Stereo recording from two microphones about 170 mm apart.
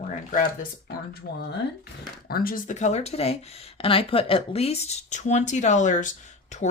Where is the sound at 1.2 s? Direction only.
65° left (ahead or behind).